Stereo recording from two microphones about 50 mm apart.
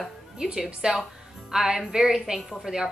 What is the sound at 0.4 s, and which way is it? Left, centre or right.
A woman's voice, centre.